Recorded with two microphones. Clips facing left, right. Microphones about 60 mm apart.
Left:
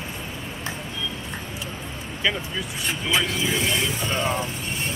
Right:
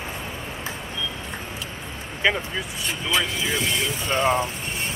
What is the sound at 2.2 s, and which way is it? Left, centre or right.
Speech, centre.